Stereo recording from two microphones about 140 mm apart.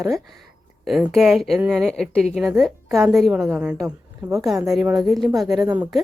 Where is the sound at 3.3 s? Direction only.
15° right (ahead or behind).